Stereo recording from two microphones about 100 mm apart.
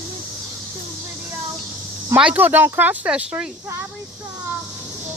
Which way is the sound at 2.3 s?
20° right (ahead or behind).